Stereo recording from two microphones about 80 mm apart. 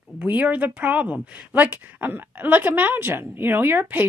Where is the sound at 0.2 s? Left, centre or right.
Centre.